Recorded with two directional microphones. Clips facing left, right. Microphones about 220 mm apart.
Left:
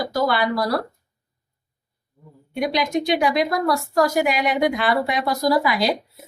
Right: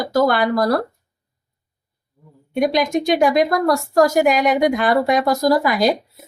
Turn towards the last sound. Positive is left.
turn(degrees=-45)  # may be behind; listen again after turning